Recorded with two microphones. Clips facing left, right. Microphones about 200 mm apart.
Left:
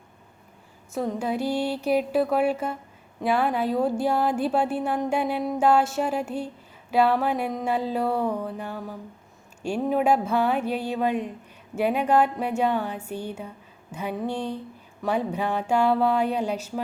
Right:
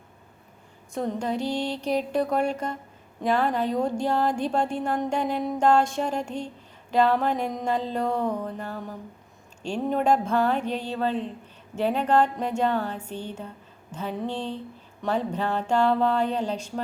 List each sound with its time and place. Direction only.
0.9 s a woman's voice: 5° left (ahead or behind)